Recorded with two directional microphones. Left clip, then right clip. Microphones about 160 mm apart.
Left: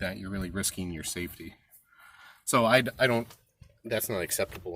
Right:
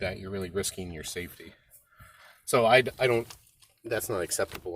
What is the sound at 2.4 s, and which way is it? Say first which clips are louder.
Speech: right 2 dB; 15° left (ahead or behind).